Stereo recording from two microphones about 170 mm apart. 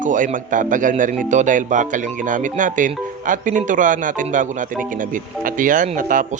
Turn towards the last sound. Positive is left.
turn(degrees=-50)  # may be behind; listen again after turning